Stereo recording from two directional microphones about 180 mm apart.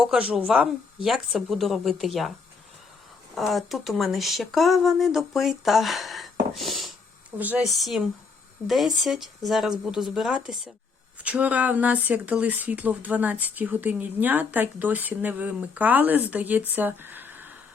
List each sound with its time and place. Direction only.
0.0 s speech: 5° right (ahead or behind)
3.3 s speech: centre (ahead or behind)